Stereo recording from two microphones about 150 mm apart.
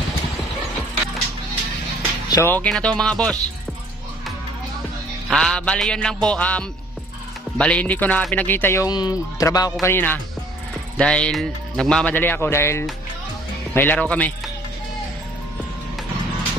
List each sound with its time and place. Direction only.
2.3 s a man's voice: 15° left (ahead or behind)
2.7 s music: 5° left (ahead or behind)
5.3 s music: 5° left (ahead or behind)
7.5 s a man's voice: 10° left (ahead or behind)
8.8 s a man's voice: 25° left (ahead or behind); by 14.5 s 10° left (ahead or behind)